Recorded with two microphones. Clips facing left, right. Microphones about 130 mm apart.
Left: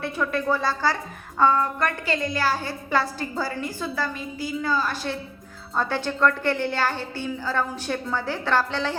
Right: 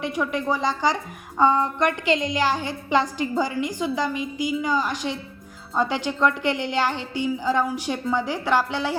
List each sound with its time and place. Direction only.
0.0 s a woman's voice: 15° right (ahead or behind)